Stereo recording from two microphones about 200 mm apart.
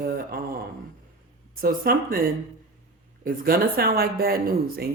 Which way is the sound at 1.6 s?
45° right (ahead or behind).